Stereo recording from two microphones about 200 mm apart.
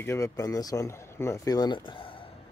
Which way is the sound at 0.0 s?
15° left (ahead or behind).